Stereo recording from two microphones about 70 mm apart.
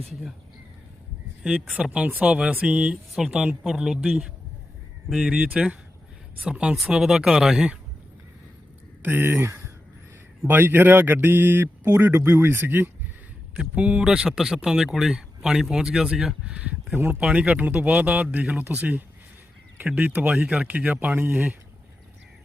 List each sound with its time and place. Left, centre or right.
2.0 s speech: right; by 5.3 s centre
5.3 s speech: centre
9.0 s speech: right
10.5 s speech: right
13.6 s speech: centre
16.5 s speech: centre
16.9 s speech: right
17.2 s speech: centre
20.3 s speech: centre
20.6 s speech: centre